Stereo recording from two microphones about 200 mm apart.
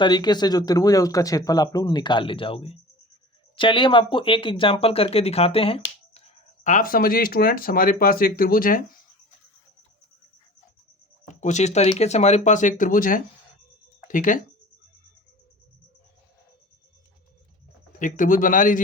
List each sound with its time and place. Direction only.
0.0 s speech: 20° left (ahead or behind)
6.7 s speech: 40° left (ahead or behind)
11.3 s speech: 35° left (ahead or behind)
18.0 s speech: 40° left (ahead or behind)